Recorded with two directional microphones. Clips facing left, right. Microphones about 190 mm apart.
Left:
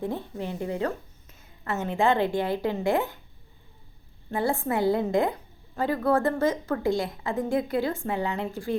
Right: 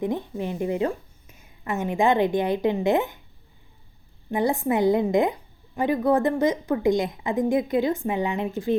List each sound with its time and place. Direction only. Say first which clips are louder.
0.0 s a woman's voice: right 4 dB; 15° right (ahead or behind)
4.3 s a woman's voice: right 4 dB; 15° right (ahead or behind)